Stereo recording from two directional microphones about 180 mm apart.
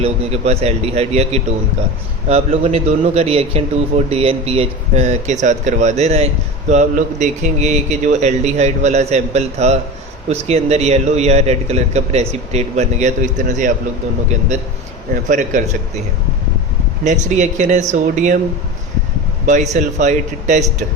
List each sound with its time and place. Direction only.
0.0 s speech: 35° right (ahead or behind)
15.1 s a man's voice: 45° right (ahead or behind)
17.0 s a man's voice: 40° right (ahead or behind)
19.5 s speech: 40° right (ahead or behind)